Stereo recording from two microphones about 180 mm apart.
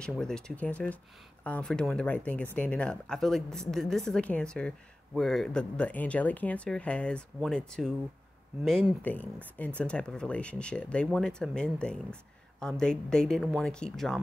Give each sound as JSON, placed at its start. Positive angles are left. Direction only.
{"t": 0.0, "sound": "a woman's voice", "side_deg": 5}